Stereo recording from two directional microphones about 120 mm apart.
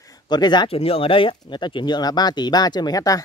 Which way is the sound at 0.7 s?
55° left (ahead or behind).